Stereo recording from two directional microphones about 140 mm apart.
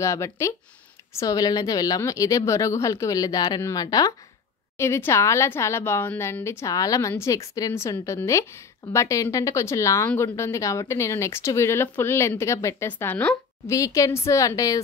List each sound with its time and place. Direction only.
0.0 s a woman's voice: 20° left (ahead or behind)
13.7 s a woman's voice: 25° left (ahead or behind)